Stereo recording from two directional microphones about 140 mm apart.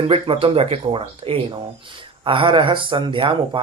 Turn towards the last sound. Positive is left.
turn(degrees=-35)  # may be behind; listen again after turning